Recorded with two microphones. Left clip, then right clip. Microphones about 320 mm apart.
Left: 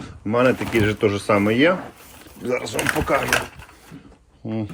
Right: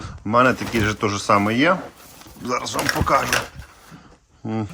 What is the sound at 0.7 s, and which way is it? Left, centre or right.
Speech, centre.